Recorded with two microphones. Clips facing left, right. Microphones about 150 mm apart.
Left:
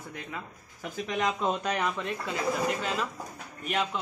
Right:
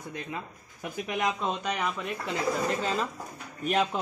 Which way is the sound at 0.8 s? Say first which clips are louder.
Even; 10° right (ahead or behind).